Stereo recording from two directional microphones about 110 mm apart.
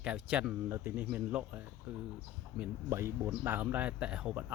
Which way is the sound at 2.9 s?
25° right (ahead or behind).